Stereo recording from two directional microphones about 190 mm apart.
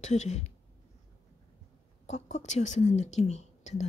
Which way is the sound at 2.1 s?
35° left (ahead or behind).